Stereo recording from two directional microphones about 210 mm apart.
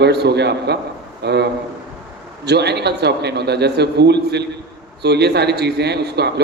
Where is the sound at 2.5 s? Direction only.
50° right (ahead or behind).